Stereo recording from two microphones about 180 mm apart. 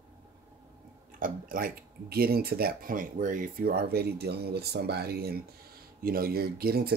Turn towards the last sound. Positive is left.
turn(degrees=-60)  # may be behind; listen again after turning